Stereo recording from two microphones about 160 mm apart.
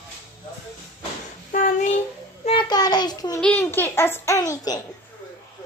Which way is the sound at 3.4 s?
10° left (ahead or behind).